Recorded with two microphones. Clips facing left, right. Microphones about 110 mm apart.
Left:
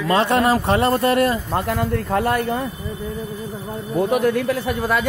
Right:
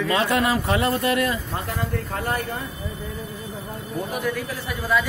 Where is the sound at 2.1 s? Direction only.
70° left (ahead or behind).